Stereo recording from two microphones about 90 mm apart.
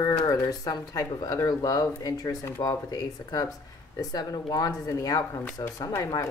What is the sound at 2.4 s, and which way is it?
Speech, 30° left (ahead or behind).